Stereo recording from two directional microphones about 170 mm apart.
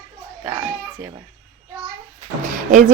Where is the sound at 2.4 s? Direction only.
45° right (ahead or behind).